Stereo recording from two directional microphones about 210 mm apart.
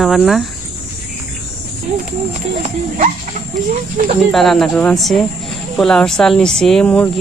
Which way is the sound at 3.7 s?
40° right (ahead or behind).